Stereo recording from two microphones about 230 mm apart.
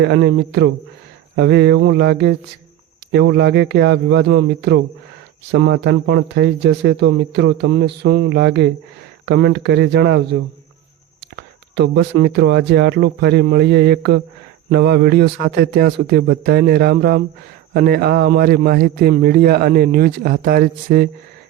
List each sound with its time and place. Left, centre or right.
0.0 s speech: right
11.3 s a man's voice: right